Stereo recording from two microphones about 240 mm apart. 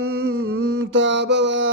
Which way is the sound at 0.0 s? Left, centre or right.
Right.